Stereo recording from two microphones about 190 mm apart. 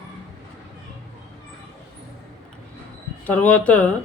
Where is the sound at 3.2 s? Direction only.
5° left (ahead or behind).